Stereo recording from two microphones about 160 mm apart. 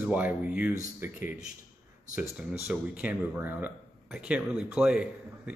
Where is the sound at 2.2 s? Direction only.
10° right (ahead or behind).